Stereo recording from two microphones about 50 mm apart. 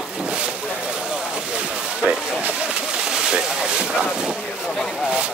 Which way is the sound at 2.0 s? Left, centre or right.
Right.